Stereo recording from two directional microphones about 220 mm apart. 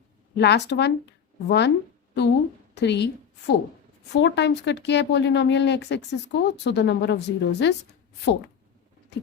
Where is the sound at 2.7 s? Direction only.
50° left (ahead or behind).